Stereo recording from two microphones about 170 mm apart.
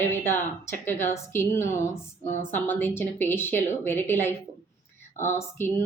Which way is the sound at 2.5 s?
10° left (ahead or behind).